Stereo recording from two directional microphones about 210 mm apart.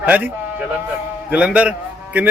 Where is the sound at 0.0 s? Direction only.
10° right (ahead or behind).